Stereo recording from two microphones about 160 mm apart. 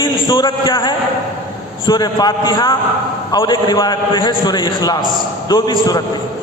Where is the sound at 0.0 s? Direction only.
25° left (ahead or behind).